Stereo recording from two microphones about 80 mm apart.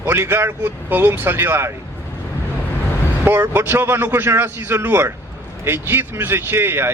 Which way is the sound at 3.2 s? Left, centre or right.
Right.